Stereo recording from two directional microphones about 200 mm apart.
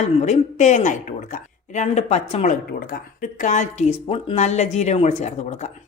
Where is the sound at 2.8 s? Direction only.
50° left (ahead or behind).